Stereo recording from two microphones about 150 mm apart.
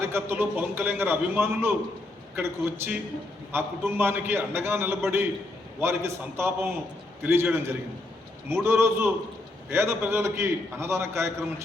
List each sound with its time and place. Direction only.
0.0 s a man's voice: 15° right (ahead or behind)